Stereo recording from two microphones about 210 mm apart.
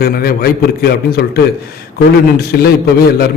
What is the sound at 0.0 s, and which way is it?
A man's voice, 45° left (ahead or behind).